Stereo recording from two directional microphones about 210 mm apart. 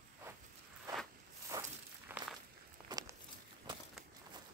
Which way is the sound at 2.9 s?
15° right (ahead or behind).